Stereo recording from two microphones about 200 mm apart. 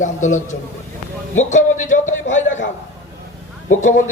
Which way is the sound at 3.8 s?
35° left (ahead or behind).